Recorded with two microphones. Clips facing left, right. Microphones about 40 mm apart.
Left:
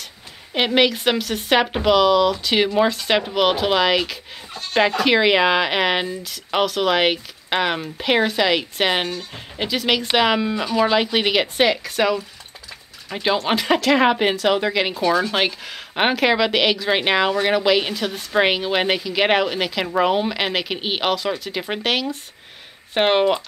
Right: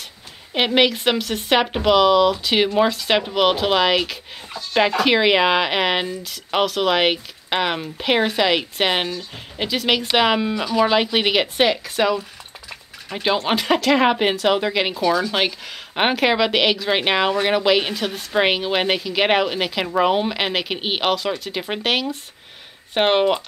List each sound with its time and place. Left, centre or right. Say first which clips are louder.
0.6 s a woman's voice: even; centre
15.0 s speech: left 1 dB; centre
15.3 s a woman's voice: even; centre